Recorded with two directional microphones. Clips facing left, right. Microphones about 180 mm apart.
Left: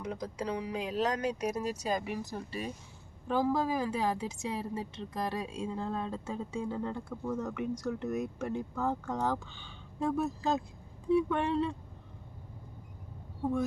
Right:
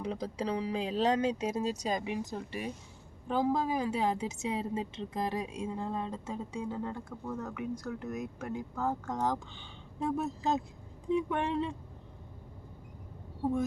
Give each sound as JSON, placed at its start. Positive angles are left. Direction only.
{"t": 0.0, "sound": "a woman's voice", "side_deg": -30}
{"t": 7.3, "sound": "speech", "side_deg": 0}
{"t": 9.0, "sound": "speech", "side_deg": -15}